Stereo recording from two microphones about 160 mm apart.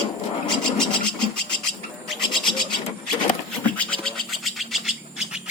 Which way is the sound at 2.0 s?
Centre (ahead or behind).